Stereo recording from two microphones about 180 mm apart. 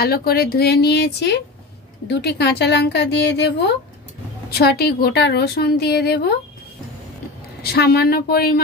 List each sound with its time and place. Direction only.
0.0 s a woman's voice: 60° left (ahead or behind)
7.6 s a woman's voice: 60° left (ahead or behind)